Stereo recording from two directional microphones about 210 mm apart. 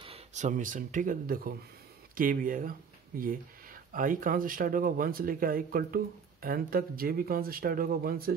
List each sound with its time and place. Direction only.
0.0 s speech: 30° right (ahead or behind)